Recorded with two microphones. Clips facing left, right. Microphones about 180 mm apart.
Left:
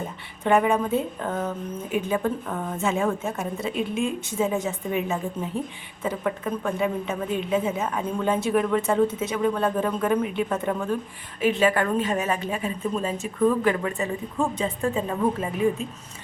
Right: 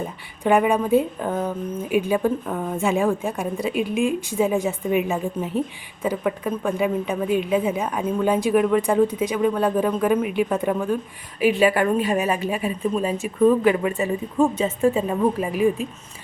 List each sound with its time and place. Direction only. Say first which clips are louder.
0.4 s a woman's voice: right 2 dB; 10° right (ahead or behind)